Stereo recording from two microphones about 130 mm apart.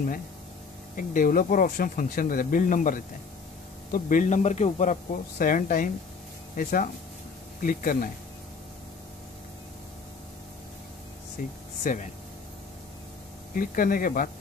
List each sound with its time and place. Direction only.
0.9 s speech: 90° left
11.8 s speech: 90° left
13.5 s speech: 90° left